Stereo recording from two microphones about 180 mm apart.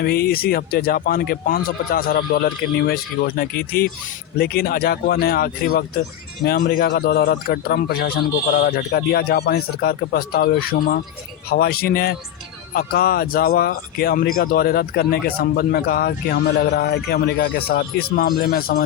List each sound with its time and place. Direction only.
0.0 s speech: 60° left (ahead or behind)